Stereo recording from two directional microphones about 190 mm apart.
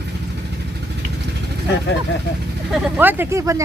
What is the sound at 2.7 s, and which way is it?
Speech, 5° right (ahead or behind).